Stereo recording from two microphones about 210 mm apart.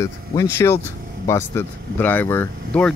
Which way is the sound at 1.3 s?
10° left (ahead or behind).